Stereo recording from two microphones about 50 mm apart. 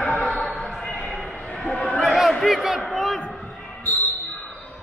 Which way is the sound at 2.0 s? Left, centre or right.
Centre.